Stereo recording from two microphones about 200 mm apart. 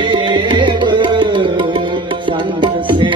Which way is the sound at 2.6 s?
25° right (ahead or behind).